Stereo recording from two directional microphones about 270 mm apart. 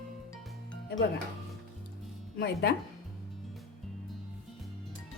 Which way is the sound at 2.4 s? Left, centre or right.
Left.